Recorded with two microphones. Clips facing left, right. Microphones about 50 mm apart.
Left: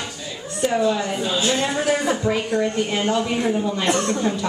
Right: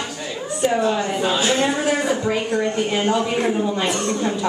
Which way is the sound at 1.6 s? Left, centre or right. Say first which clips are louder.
Right 1 dB; centre.